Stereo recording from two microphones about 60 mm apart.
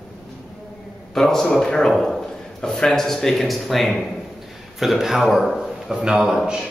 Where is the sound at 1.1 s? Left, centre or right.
Centre.